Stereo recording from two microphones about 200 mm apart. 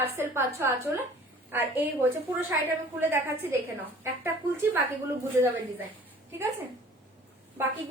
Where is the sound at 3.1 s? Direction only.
10° right (ahead or behind).